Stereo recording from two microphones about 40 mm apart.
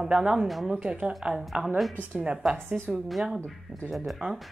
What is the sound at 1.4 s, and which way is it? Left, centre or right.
Speech, centre.